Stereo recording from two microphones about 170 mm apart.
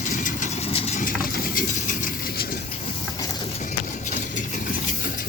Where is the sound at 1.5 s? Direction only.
50° left (ahead or behind).